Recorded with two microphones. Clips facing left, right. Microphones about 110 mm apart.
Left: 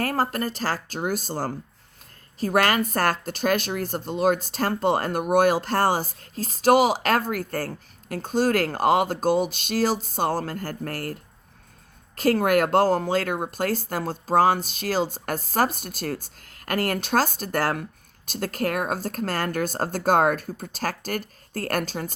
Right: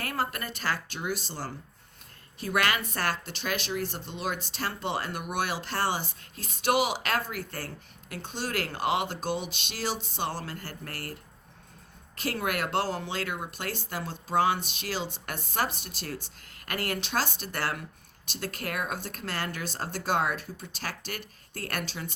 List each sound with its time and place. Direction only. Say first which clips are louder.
0.0 s speech: left 8 dB; 40° left (ahead or behind)